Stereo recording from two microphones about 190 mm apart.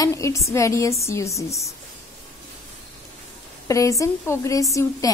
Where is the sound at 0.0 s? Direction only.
15° left (ahead or behind).